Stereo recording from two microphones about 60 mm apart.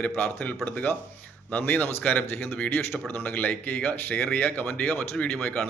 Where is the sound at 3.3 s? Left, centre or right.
Left.